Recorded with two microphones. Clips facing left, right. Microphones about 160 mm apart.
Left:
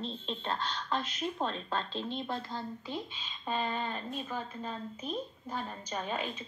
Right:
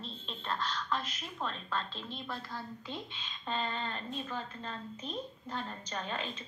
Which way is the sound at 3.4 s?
10° left (ahead or behind).